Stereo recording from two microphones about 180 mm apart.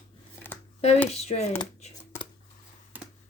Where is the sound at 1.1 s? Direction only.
35° left (ahead or behind).